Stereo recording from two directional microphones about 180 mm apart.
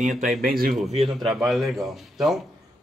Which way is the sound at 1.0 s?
Centre (ahead or behind).